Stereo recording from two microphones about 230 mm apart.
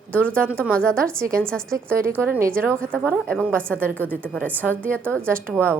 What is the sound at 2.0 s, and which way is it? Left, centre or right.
A woman's voice, centre.